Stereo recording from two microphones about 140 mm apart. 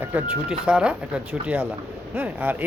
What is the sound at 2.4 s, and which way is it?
Speech, 10° right (ahead or behind).